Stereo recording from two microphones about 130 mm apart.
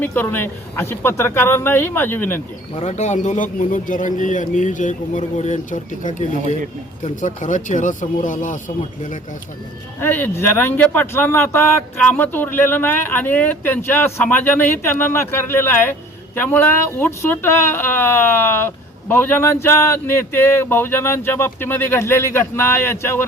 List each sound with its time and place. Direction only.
0.0 s speech: 15° left (ahead or behind)
2.7 s a man's voice: 60° left (ahead or behind); by 9.1 s 80° left
10.0 s speech: 15° left (ahead or behind)